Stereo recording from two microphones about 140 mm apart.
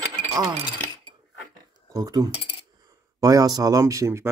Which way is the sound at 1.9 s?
25° right (ahead or behind).